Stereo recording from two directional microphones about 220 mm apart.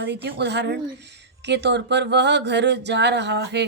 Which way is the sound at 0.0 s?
50° right (ahead or behind).